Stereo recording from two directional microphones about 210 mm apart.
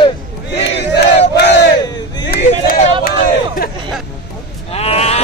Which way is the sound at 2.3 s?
40° left (ahead or behind).